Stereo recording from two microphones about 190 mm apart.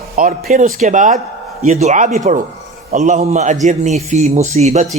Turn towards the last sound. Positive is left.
turn(degrees=-35)  # may be behind; listen again after turning